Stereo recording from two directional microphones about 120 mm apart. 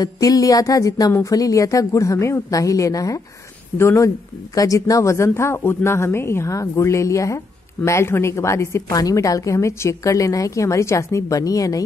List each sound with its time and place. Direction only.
0.0 s speech: 30° left (ahead or behind)